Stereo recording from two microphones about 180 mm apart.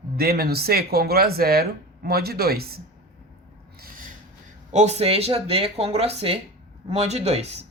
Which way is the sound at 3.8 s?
50° right (ahead or behind).